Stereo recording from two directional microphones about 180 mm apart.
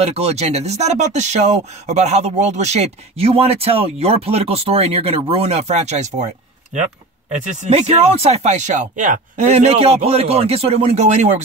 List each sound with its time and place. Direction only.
0.0 s speech: 35° right (ahead or behind)